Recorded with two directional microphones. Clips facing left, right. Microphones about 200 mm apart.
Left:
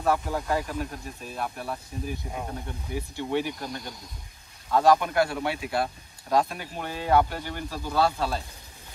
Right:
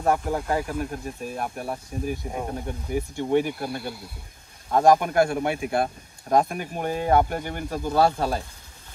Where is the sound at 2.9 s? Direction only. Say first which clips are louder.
Right 6 dB; 50° right (ahead or behind).